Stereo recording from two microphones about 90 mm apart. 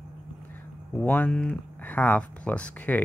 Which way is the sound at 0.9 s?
15° left (ahead or behind).